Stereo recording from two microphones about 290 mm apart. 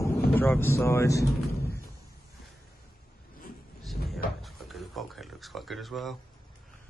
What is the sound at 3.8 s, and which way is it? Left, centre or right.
Cupboard open or close, centre.